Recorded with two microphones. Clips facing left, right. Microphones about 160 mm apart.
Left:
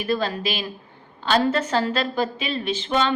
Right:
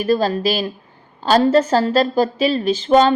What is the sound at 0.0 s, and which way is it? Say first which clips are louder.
A woman's voice: right 7 dB; 40° right (ahead or behind).